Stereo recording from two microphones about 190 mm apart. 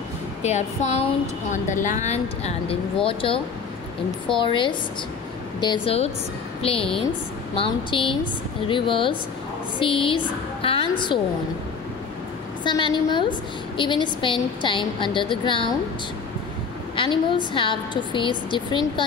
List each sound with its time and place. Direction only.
0.4 s a woman's voice: 35° left (ahead or behind)
4.4 s a woman's voice: 25° left (ahead or behind)
12.6 s a woman's voice: 25° left (ahead or behind)
16.9 s a sound: 25° left (ahead or behind)
17.6 s a woman's voice: 25° left (ahead or behind)